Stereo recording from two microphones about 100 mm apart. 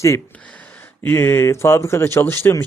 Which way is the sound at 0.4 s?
15° left (ahead or behind).